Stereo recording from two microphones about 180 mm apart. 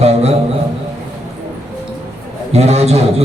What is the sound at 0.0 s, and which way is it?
Music, 35° right (ahead or behind).